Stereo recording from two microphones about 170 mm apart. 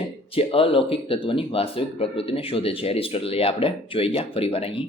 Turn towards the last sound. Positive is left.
turn(degrees=35)  # may be behind; listen again after turning